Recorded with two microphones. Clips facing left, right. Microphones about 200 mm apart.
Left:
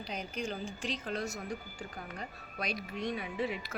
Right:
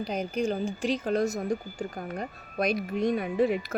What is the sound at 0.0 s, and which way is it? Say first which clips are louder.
Speech: right 10 dB; 45° right (ahead or behind).